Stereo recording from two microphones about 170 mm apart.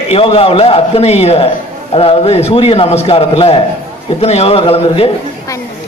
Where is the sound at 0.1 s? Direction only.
35° left (ahead or behind).